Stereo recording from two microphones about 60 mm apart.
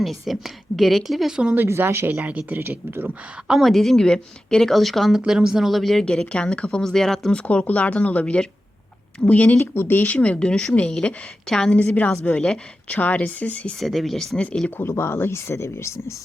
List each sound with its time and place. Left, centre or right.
0.0 s a woman's voice: centre
1.8 s speech: right
2.0 s speech: right
3.6 s speech: centre
4.7 s a woman's voice: centre
5.2 s speech: centre
7.3 s speech: left
9.6 s speech: left
9.9 s speech: left
11.8 s speech: left
13.7 s a woman's voice: centre
14.8 s speech: left